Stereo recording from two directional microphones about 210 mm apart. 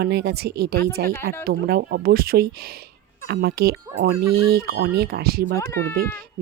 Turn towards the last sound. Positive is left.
turn(degrees=15)  # may be behind; listen again after turning